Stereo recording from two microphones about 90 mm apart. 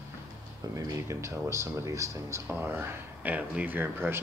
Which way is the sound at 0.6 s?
40° right (ahead or behind).